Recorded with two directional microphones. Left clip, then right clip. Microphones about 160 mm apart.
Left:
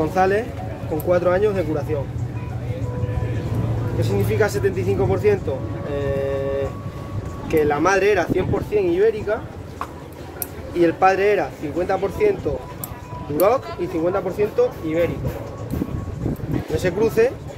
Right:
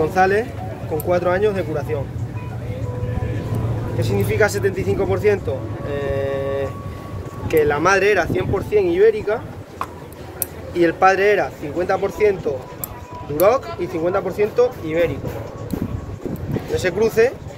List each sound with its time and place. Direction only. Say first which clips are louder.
0.0 s speech: right 2 dB; 20° left (ahead or behind)
4.0 s speech: right 2 dB; 10° left (ahead or behind)
5.9 s vehicle: right 1 dB; 15° left (ahead or behind)
7.4 s speech: right 2 dB; 10° left (ahead or behind)
8.7 s speech: right 3 dB; centre (ahead or behind)
10.8 s speech: right 2 dB; 10° left (ahead or behind)
13.4 s speech: right 2 dB; 10° left (ahead or behind)
16.7 s speech: right 2 dB; centre (ahead or behind)